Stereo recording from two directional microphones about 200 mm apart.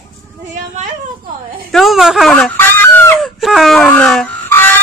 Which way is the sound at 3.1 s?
Centre (ahead or behind).